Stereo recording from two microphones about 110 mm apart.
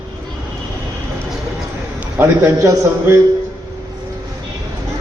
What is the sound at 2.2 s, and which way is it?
Speech, 20° right (ahead or behind).